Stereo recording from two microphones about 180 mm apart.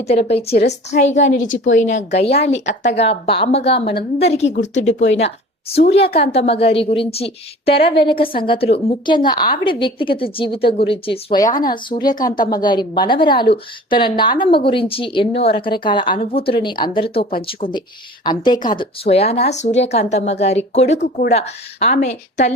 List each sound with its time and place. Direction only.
0.0 s a woman's voice: 35° left (ahead or behind)